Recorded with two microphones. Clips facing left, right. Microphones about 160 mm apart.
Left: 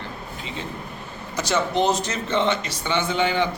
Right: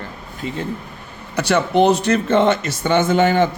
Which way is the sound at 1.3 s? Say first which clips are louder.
Right 6 dB; 60° right (ahead or behind).